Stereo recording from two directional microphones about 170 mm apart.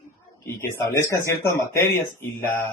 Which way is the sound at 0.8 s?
15° left (ahead or behind).